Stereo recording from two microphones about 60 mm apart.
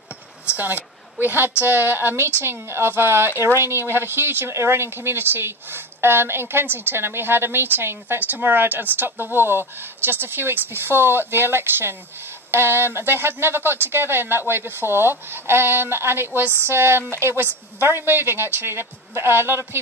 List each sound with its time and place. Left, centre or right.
0.5 s a woman's voice: right
2.1 s a woman's voice: right